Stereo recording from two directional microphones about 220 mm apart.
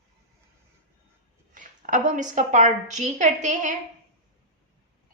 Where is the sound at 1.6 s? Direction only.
35° right (ahead or behind).